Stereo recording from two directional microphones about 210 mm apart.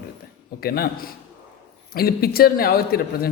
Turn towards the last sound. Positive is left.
turn(degrees=45)  # may be behind; listen again after turning